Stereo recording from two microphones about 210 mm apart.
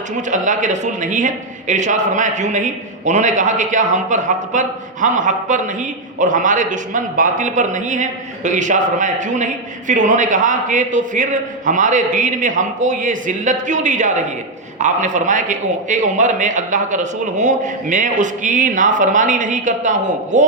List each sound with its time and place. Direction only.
0.2 s a man's voice: 35° right (ahead or behind)